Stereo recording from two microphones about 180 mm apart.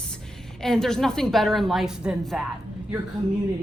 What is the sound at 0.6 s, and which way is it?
A woman's voice, 5° left (ahead or behind).